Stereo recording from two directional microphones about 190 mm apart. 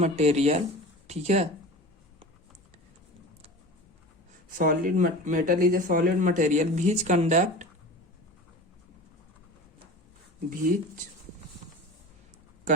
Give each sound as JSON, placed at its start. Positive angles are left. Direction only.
{"t": 0.0, "sound": "speech", "side_deg": -35}
{"t": 4.4, "sound": "speech", "side_deg": -45}
{"t": 10.5, "sound": "speech", "side_deg": -45}